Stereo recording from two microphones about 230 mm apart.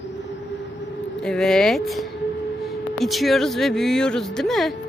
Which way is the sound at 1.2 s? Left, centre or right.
Centre.